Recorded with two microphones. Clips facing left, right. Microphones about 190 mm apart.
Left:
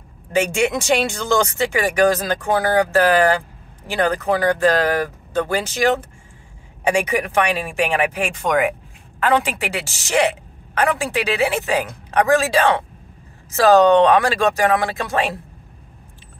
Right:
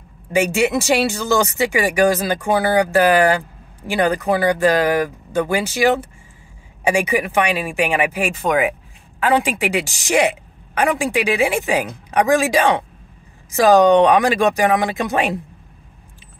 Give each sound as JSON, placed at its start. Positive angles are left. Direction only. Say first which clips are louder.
{"t": 0.3, "sound": "speech", "louder": "right 2 dB", "side_deg": -5}